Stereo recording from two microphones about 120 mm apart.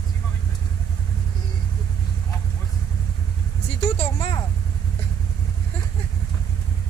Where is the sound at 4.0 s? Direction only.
45° left (ahead or behind).